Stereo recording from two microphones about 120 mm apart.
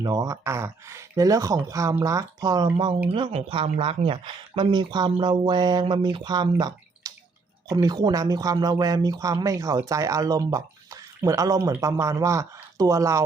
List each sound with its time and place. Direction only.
0.0 s speech: 30° right (ahead or behind)